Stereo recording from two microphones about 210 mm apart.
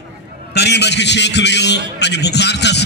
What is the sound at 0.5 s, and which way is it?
A man's voice, 55° left (ahead or behind).